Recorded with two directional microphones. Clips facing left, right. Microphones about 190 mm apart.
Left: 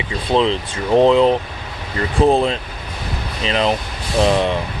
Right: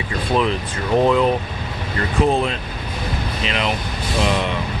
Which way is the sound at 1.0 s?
25° left (ahead or behind).